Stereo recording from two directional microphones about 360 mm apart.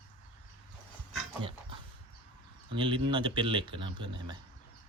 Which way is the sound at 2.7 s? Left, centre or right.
Centre.